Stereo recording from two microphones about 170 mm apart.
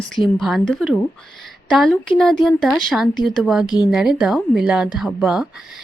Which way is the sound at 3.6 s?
25° left (ahead or behind).